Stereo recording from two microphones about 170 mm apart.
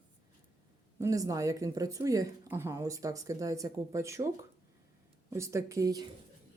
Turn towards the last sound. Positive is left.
turn(degrees=-20)  # may be behind; listen again after turning